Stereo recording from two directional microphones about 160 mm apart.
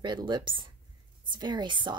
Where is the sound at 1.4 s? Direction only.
30° right (ahead or behind).